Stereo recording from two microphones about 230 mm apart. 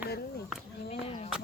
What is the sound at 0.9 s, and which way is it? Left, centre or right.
Speech, left.